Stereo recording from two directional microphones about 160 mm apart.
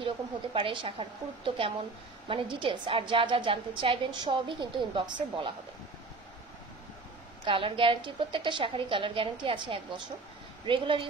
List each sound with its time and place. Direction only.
0.6 s a woman's voice: 35° right (ahead or behind)
7.4 s a woman's voice: 35° right (ahead or behind)